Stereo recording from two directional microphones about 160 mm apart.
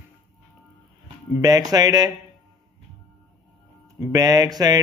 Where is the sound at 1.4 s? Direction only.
20° right (ahead or behind).